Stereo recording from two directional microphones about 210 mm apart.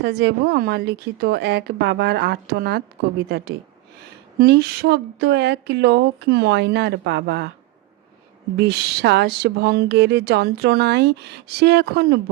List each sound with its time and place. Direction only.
0.0 s speech: 55° right (ahead or behind)
8.5 s speech: 50° right (ahead or behind)